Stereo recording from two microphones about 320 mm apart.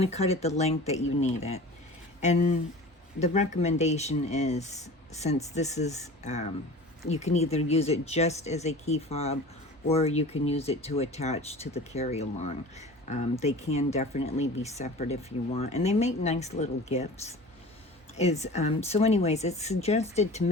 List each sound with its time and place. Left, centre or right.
0.0 s speech: centre